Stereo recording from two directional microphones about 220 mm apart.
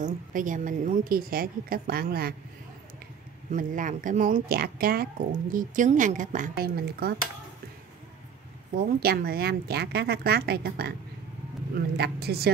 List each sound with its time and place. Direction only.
0.0 s speech: 35° right (ahead or behind)
3.5 s speech: 35° right (ahead or behind)
8.7 s speech: 45° right (ahead or behind)